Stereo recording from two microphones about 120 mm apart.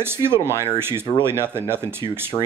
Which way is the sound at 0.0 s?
20° right (ahead or behind).